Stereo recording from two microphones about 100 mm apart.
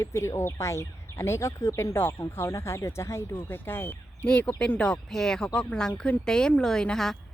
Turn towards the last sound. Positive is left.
turn(degrees=5)  # may be behind; listen again after turning